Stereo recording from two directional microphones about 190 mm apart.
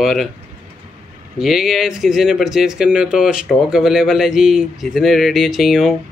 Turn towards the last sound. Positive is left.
turn(degrees=0)  # may be behind; listen again after turning